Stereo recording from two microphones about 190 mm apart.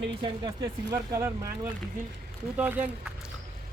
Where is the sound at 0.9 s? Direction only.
15° right (ahead or behind).